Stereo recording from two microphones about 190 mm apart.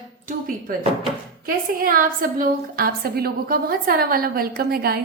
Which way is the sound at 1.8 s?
45° right (ahead or behind).